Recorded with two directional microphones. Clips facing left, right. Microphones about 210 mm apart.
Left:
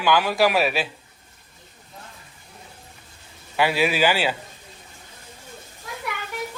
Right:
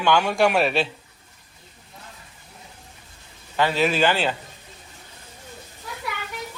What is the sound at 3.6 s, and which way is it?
Speech, 10° left (ahead or behind).